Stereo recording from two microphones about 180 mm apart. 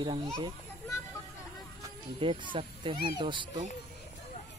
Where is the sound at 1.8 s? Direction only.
25° right (ahead or behind).